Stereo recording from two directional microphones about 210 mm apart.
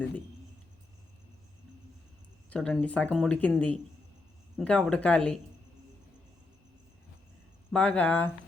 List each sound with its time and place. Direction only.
2.5 s speech: 5° left (ahead or behind)
7.7 s speech: 5° left (ahead or behind)